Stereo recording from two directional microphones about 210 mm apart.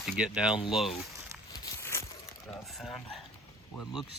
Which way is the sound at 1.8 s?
10° left (ahead or behind).